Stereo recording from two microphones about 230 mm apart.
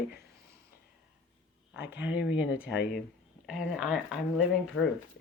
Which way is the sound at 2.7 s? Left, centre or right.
Left.